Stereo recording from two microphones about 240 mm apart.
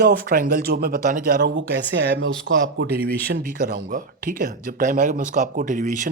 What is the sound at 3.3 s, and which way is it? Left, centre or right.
Speech, right.